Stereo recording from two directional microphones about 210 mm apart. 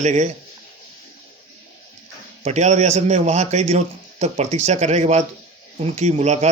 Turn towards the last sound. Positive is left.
turn(degrees=-35)  # may be behind; listen again after turning